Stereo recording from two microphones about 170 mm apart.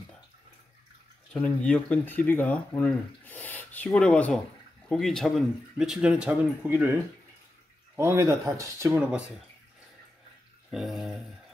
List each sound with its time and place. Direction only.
1.3 s speech: 5° left (ahead or behind); by 9.2 s 10° right (ahead or behind)
10.7 s speech: centre (ahead or behind)